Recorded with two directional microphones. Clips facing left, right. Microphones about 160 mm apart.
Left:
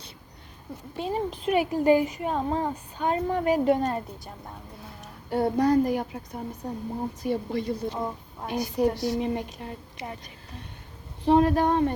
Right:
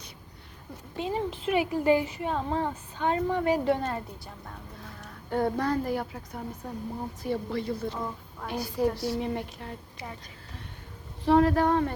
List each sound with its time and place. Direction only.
1.1 s speech: 15° left (ahead or behind)
4.9 s a sound: 15° left (ahead or behind)
5.8 s speech: 20° left (ahead or behind)
11.3 s speech: 15° left (ahead or behind)